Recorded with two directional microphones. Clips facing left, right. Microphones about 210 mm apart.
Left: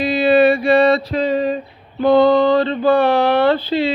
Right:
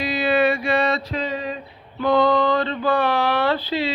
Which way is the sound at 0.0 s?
25° left (ahead or behind).